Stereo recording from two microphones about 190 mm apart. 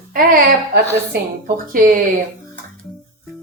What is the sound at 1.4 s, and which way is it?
Speech, 45° right (ahead or behind).